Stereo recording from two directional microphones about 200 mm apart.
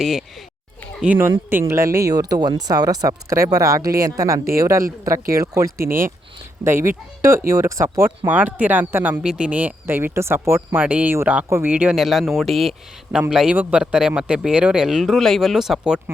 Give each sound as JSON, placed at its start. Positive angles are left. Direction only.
{"t": 0.0, "sound": "a man's voice", "side_deg": 0}